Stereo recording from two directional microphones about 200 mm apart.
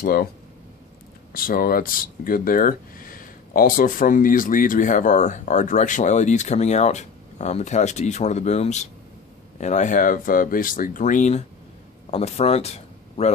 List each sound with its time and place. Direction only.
0.0 s speech: 50° left (ahead or behind)
1.3 s speech: 45° left (ahead or behind)